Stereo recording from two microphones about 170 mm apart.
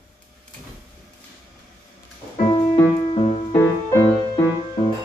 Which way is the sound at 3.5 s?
15° left (ahead or behind).